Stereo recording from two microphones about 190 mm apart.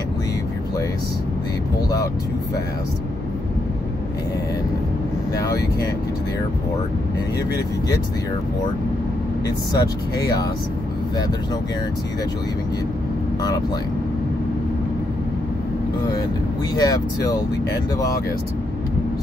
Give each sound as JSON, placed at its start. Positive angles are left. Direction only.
{"t": 5.3, "sound": "speech", "side_deg": 20}
{"t": 9.8, "sound": "speech", "side_deg": 20}
{"t": 16.7, "sound": "speech", "side_deg": 20}